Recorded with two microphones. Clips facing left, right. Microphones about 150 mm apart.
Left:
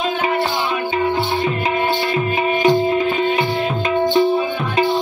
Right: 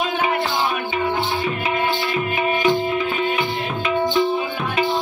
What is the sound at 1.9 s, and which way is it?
Music, 40° left (ahead or behind).